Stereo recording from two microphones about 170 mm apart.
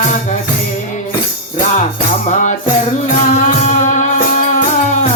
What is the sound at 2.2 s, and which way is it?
Music, 45° left (ahead or behind).